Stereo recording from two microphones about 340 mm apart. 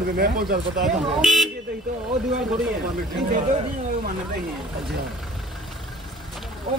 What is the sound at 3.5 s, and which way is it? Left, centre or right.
Speech, right.